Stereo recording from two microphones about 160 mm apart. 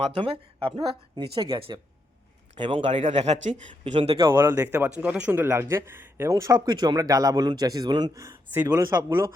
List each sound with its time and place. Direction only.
0.0 s a man's voice: 35° right (ahead or behind)
4.4 s a man's voice: 10° right (ahead or behind)